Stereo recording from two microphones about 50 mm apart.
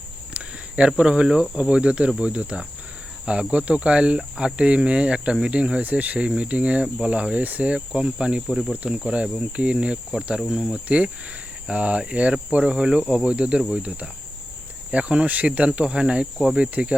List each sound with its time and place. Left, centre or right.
0.3 s speech: centre
1.7 s cricket: right
8.4 s speech: centre
8.7 s cricket: right
10.5 s speech: centre
10.8 s cricket: right